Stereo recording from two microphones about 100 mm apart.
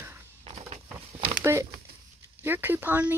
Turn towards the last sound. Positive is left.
turn(degrees=-20)  # may be behind; listen again after turning